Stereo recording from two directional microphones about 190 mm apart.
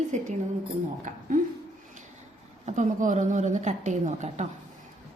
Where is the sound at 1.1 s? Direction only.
45° right (ahead or behind).